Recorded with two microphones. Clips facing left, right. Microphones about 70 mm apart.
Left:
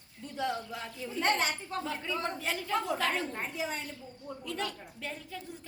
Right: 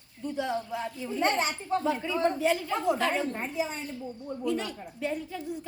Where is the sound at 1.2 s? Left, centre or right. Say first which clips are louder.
Right 2 dB; right.